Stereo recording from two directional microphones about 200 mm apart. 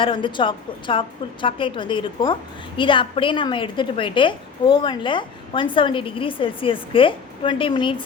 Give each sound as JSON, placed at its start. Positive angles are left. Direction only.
{"t": 0.0, "sound": "a woman's voice", "side_deg": 25}